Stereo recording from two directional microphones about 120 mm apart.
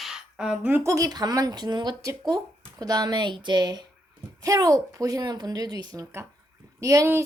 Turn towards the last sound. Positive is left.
turn(degrees=-25)  # may be behind; listen again after turning